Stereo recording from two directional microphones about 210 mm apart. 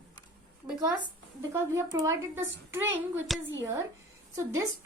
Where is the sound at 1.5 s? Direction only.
15° right (ahead or behind).